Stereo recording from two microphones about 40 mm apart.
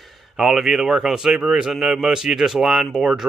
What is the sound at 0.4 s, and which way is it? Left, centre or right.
Speech, centre.